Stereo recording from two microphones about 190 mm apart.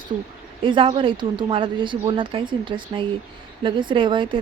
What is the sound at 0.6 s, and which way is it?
A woman's voice, 30° right (ahead or behind).